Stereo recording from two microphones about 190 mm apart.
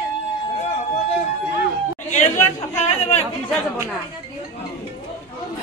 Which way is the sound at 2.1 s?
40° left (ahead or behind).